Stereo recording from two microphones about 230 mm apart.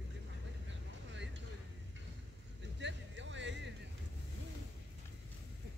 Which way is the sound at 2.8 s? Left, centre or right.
Right.